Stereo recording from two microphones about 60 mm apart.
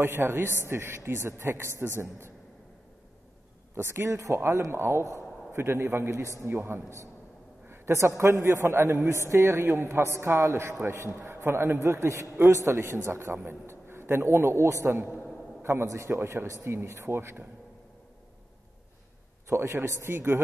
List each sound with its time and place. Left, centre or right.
0.0 s a man's voice: right
3.7 s a man's voice: right
6.1 s a man's voice: right
6.5 s a man's voice: right
7.6 s a sound: right
8.2 s a man's voice: right
16.1 s speech: right
16.6 s a man's voice: right
19.4 s a man's voice: right